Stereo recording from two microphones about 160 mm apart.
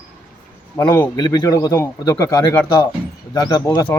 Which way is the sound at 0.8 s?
20° left (ahead or behind).